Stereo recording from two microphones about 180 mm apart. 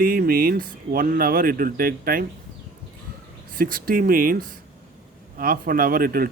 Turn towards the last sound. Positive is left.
turn(degrees=-55)  # may be behind; listen again after turning